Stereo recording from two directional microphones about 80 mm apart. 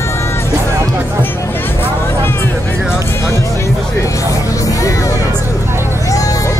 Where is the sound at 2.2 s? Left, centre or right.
Left.